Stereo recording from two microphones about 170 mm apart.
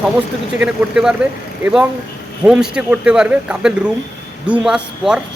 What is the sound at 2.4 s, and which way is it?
Speech, 5° right (ahead or behind).